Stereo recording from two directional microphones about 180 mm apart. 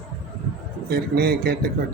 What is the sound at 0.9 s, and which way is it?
Speech, 60° right (ahead or behind).